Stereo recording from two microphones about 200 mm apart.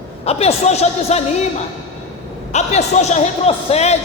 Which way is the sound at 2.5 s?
35° left (ahead or behind).